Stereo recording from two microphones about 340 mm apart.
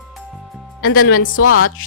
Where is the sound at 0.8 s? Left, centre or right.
Left.